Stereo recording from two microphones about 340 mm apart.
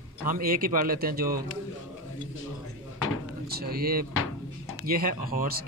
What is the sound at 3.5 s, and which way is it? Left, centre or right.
Speech, right.